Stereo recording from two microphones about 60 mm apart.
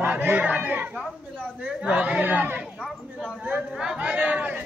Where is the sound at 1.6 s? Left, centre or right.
Centre.